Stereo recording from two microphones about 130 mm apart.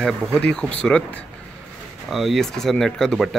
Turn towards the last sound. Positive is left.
turn(degrees=0)  # may be behind; listen again after turning